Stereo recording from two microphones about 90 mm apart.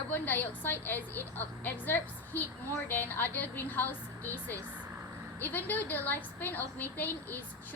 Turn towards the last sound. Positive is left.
turn(degrees=20)  # may be behind; listen again after turning